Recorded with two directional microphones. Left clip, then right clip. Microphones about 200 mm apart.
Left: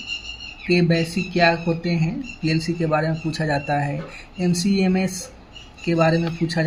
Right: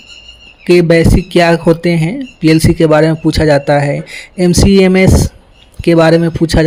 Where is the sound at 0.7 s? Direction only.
55° right (ahead or behind).